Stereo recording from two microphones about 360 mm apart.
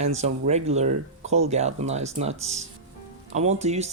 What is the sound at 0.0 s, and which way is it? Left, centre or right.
Speech, centre.